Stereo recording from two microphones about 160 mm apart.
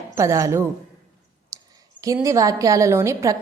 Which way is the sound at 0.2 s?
20° right (ahead or behind).